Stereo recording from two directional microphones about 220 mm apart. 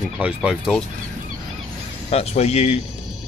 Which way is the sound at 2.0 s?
30° left (ahead or behind).